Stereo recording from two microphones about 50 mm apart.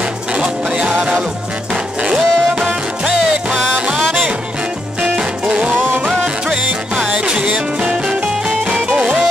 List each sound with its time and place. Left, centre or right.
0.0 s music: right
3.7 s music: right
5.7 s music: right
6.0 s music: centre